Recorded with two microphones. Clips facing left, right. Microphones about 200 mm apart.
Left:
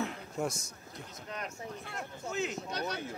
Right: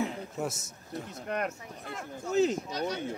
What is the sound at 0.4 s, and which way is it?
Speech, 5° right (ahead or behind).